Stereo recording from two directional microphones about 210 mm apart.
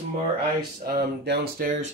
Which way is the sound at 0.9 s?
45° right (ahead or behind).